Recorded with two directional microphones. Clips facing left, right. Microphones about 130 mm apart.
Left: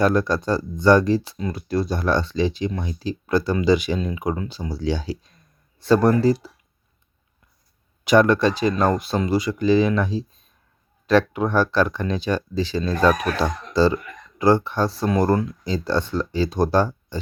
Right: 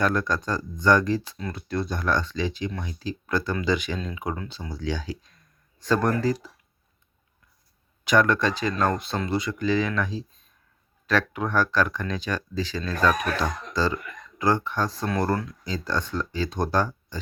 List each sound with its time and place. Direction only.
0.0 s speech: 20° left (ahead or behind)
8.1 s speech: 20° left (ahead or behind)